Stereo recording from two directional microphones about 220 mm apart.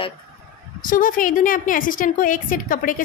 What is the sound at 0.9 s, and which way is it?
A woman's voice, 40° left (ahead or behind).